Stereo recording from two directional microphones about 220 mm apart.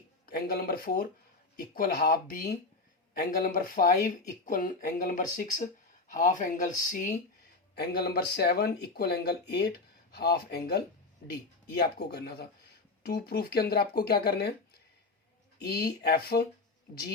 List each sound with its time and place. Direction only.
0.3 s speech: 45° left (ahead or behind)